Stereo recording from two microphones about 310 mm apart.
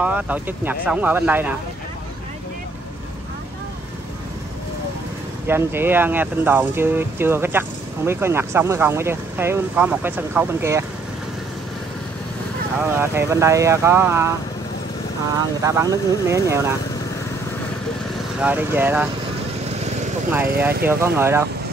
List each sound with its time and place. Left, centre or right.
0.0 s speech: centre
5.5 s speech: centre
12.7 s speech: centre
15.3 s speech: centre
18.4 s speech: centre
19.6 s vehicle: right
20.8 s speech: centre